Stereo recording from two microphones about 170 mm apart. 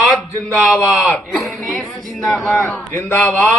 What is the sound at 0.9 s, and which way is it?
Speech, 5° right (ahead or behind).